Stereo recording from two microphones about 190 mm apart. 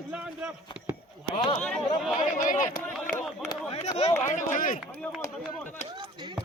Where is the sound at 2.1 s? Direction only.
40° left (ahead or behind).